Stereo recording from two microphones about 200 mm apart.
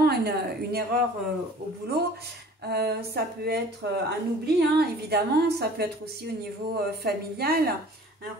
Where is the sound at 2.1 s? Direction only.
50° right (ahead or behind).